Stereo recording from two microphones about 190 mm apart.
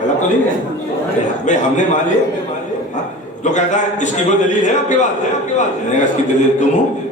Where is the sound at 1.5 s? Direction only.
40° left (ahead or behind).